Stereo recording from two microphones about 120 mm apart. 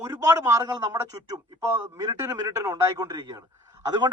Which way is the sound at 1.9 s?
25° right (ahead or behind).